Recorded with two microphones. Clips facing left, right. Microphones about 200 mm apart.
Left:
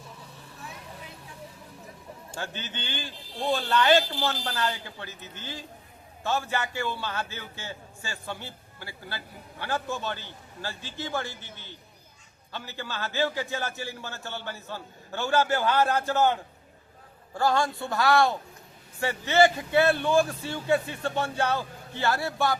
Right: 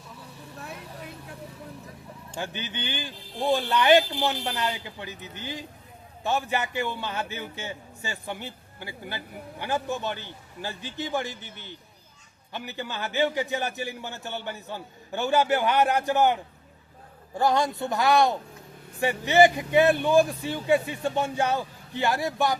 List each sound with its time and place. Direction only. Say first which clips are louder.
2.3 s a man's voice: right 3 dB; 15° right (ahead or behind)